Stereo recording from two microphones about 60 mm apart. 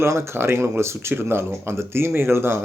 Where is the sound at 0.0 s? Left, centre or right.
Right.